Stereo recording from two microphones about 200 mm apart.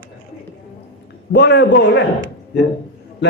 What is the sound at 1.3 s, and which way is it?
Mantra, 60° left (ahead or behind).